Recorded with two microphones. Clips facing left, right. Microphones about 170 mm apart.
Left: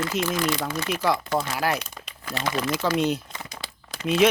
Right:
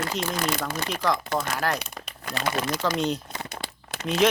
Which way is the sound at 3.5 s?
65° right (ahead or behind).